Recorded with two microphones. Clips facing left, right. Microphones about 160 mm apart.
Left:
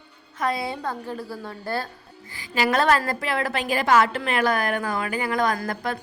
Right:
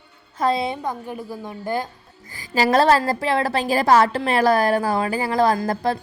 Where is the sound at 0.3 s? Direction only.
30° right (ahead or behind).